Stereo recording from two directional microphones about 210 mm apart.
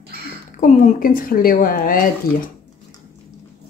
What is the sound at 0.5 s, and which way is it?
Speech, 35° left (ahead or behind).